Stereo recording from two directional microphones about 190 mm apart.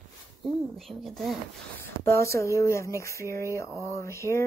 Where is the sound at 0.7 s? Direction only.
Centre (ahead or behind).